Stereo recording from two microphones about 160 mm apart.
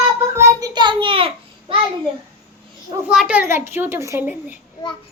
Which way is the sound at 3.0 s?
5° right (ahead or behind).